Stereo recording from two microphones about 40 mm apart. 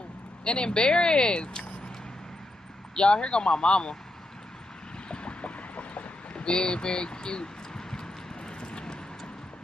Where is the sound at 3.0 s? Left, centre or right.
Left.